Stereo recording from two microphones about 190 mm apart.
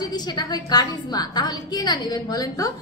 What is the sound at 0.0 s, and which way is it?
A woman's voice, 20° left (ahead or behind).